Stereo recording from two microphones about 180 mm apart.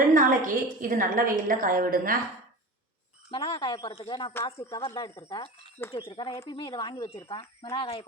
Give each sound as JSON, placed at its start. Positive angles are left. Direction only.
{"t": 0.1, "sound": "a woman's voice", "side_deg": -50}
{"t": 3.2, "sound": "speech", "side_deg": 30}
{"t": 4.4, "sound": "speech", "side_deg": 15}